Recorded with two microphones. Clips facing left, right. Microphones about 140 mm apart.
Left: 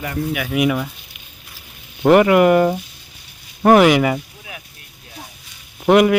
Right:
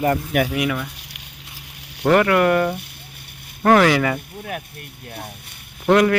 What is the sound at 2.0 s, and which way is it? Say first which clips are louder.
Speech: left 4 dB; 20° left (ahead or behind).